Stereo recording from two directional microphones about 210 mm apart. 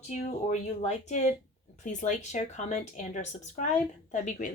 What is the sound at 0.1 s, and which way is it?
Speech, 35° left (ahead or behind).